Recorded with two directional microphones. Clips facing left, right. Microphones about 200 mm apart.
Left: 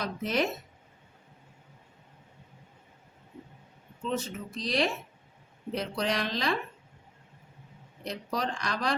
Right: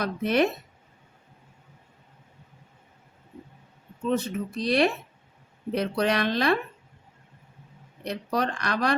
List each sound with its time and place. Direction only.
0.0 s speech: 60° right (ahead or behind)
4.1 s speech: 60° right (ahead or behind)
8.0 s speech: 60° right (ahead or behind)